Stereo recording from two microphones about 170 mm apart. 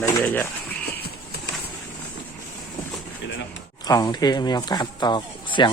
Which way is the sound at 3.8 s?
25° left (ahead or behind).